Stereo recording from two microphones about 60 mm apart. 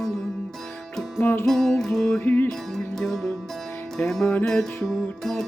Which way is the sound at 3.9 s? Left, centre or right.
Centre.